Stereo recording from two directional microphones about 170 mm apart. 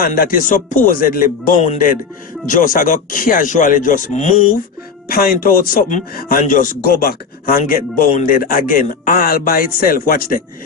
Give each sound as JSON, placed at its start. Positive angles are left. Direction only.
{"t": 0.0, "sound": "speech", "side_deg": 60}
{"t": 5.0, "sound": "speech", "side_deg": 60}